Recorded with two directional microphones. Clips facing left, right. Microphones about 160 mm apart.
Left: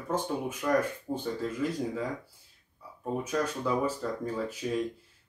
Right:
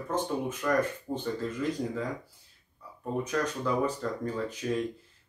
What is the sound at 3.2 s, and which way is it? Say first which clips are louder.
Speech: right 1 dB; 5° left (ahead or behind).